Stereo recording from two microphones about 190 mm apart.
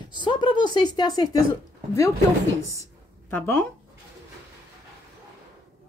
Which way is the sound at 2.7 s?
15° left (ahead or behind).